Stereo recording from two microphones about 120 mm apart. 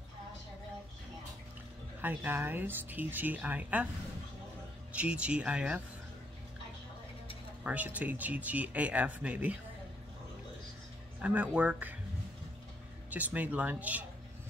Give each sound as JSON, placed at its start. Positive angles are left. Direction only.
{"t": 2.0, "sound": "speech", "side_deg": -15}
{"t": 4.9, "sound": "speech", "side_deg": -10}
{"t": 7.6, "sound": "speech", "side_deg": -10}
{"t": 11.1, "sound": "speech", "side_deg": -10}
{"t": 13.1, "sound": "speech", "side_deg": -15}